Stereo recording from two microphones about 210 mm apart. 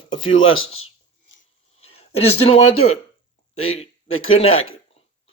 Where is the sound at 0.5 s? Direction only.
80° left.